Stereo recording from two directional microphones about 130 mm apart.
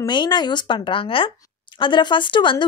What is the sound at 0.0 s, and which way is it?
Speech, 35° left (ahead or behind).